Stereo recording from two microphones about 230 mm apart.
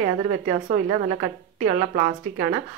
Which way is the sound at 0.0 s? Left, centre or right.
Right.